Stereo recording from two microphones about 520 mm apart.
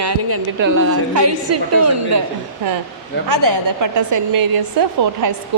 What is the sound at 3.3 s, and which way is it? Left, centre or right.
A woman's voice, right.